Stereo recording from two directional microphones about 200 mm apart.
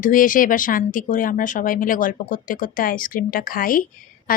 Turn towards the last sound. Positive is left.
turn(degrees=45)  # may be behind; listen again after turning